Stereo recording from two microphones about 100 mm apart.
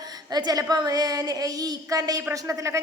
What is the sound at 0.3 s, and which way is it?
A child's voice, 45° right (ahead or behind).